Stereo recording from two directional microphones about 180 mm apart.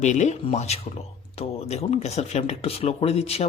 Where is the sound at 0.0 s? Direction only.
40° left (ahead or behind).